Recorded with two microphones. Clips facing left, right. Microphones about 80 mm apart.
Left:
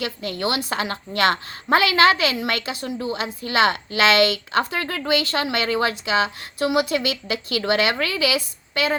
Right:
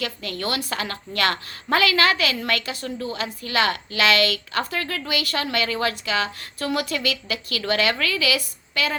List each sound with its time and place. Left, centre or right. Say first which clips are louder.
0.0 s a woman's voice: left 3 dB; left